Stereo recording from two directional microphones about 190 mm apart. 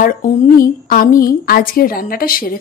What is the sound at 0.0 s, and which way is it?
A woman's voice, 50° left (ahead or behind).